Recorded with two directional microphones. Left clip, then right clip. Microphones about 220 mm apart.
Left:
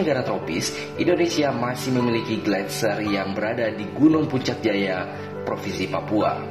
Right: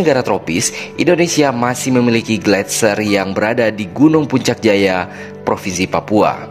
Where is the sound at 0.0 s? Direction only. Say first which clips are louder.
Right 9 dB; 50° right (ahead or behind).